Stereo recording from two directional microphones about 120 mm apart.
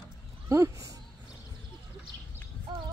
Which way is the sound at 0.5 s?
25° right (ahead or behind).